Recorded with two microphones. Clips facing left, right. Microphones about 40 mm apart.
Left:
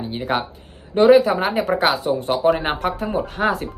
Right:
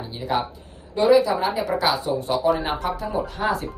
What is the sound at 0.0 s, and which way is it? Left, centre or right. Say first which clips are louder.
Speech: left 2 dB; left.